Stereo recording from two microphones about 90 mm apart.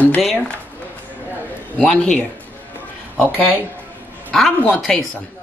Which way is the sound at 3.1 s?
20° left (ahead or behind).